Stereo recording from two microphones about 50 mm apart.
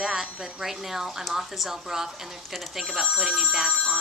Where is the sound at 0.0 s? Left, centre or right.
Centre.